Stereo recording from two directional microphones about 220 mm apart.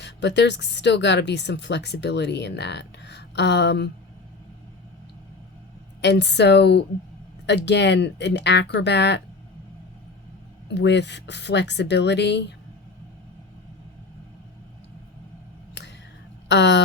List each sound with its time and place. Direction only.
0.0 s speech: 50° left (ahead or behind)
6.0 s speech: 50° left (ahead or behind)
10.8 s speech: 50° left (ahead or behind)
16.5 s speech: 50° left (ahead or behind)